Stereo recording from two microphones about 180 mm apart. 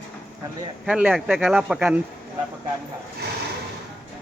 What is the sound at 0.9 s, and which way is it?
Speech, 5° right (ahead or behind).